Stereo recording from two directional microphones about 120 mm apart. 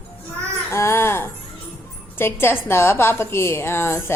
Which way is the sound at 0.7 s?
20° left (ahead or behind).